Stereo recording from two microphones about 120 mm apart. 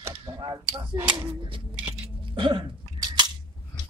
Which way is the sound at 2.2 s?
45° right (ahead or behind).